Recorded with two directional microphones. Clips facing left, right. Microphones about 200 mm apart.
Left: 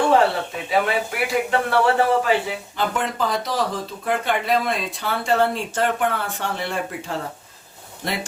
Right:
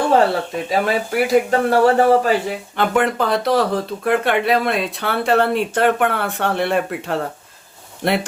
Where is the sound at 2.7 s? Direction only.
65° right (ahead or behind).